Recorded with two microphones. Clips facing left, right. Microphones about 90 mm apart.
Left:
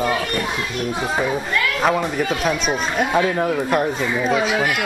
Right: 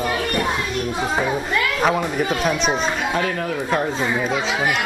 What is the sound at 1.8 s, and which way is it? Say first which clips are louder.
Speech: left 1 dB; centre (ahead or behind).